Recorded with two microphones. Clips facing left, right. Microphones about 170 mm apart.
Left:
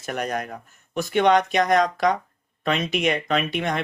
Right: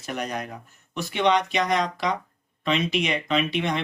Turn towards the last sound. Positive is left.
turn(degrees=45)  # may be behind; listen again after turning